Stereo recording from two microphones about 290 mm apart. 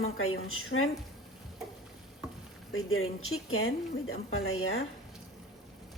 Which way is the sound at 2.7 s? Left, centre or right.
Left.